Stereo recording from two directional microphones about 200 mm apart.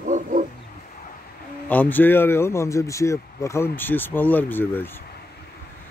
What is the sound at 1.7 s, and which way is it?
Speech, 10° left (ahead or behind).